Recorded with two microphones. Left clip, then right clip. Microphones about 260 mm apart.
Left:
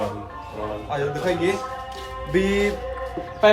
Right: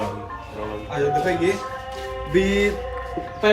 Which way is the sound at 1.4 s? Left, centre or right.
Left.